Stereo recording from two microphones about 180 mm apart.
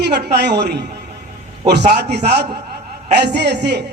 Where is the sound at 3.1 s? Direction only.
70° right (ahead or behind).